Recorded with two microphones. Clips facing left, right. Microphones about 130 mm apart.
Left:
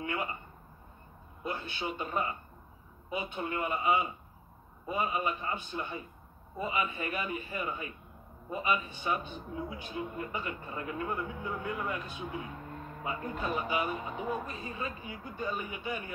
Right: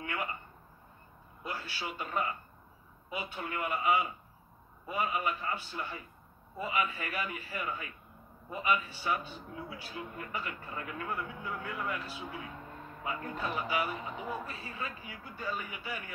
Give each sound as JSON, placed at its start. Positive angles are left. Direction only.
{"t": 0.0, "sound": "speech", "side_deg": 25}
{"t": 1.4, "sound": "a man's voice", "side_deg": 25}